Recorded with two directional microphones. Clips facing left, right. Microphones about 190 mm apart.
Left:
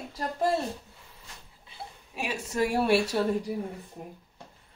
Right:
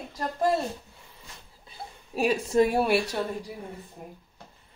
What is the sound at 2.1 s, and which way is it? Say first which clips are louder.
Speech: right 7 dB; 35° right (ahead or behind).